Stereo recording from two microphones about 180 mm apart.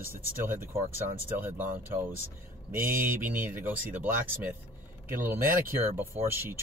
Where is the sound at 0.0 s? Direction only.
10° right (ahead or behind).